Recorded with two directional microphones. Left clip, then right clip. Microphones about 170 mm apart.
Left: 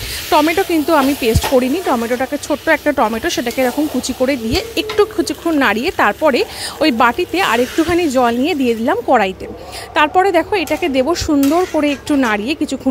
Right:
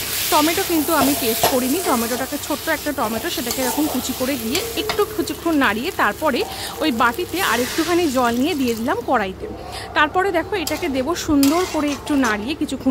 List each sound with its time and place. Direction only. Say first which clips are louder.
0.3 s a woman's voice: left 5 dB; 30° left (ahead or behind)